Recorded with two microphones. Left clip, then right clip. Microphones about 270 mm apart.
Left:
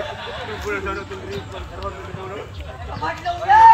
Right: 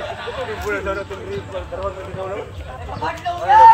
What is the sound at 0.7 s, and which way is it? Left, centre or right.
Speech, right.